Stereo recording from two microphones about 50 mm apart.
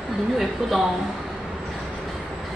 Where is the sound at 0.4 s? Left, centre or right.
Centre.